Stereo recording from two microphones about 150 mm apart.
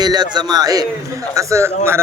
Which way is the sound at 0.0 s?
30° right (ahead or behind).